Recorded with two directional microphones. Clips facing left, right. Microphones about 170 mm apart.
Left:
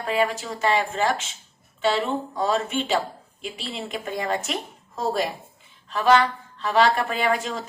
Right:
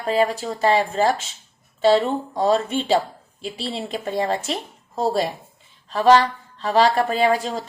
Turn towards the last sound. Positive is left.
turn(degrees=-35)  # may be behind; listen again after turning